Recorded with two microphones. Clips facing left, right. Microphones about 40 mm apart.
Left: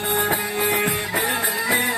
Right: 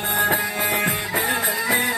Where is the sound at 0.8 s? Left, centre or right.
Centre.